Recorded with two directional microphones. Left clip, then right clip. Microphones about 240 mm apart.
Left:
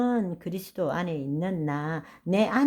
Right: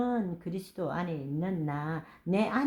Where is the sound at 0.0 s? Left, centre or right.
Left.